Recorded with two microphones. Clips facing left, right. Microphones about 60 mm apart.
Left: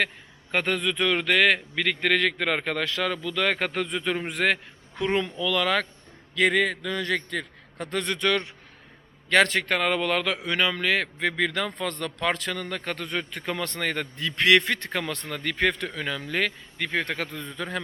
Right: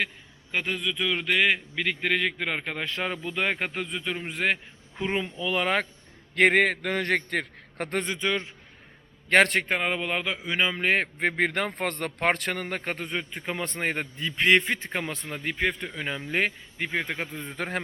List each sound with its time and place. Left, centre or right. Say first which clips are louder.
0.5 s a man's voice: left 4 dB; centre
3.0 s a man's voice: even; right; by 5.3 s centre
5.4 s speech: left 1 dB; right
6.3 s a man's voice: right 2 dB; right
8.0 s speech: left 3 dB; centre
9.6 s a man's voice: left 3 dB; centre
10.8 s a man's voice: even; right
12.6 s speech: even; right
13.0 s speech: left 1 dB; centre
16.0 s speech: right 1 dB; right